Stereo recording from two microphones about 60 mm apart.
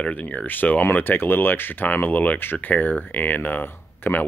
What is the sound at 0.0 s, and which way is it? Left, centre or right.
Speech, left.